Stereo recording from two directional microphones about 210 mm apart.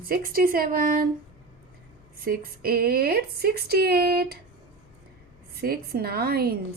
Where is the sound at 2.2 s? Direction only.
45° right (ahead or behind).